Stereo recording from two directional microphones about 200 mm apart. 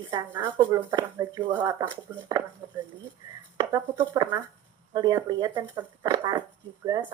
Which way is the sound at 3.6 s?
20° right (ahead or behind).